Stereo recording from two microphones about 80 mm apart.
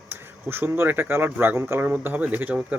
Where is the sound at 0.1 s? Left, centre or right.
Right.